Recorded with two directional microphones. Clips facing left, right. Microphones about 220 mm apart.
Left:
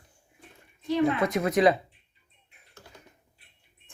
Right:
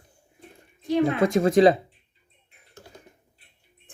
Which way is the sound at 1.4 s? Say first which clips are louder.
Right 6 dB; 30° right (ahead or behind).